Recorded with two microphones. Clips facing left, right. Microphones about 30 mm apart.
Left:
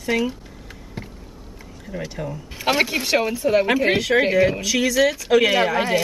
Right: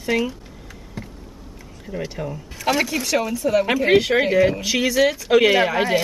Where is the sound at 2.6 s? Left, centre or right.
Left.